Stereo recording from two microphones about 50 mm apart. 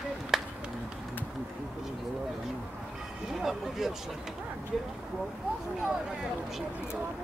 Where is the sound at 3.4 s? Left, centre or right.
Centre.